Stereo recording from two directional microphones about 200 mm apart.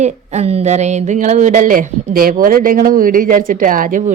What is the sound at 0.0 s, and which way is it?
Speech, 35° right (ahead or behind).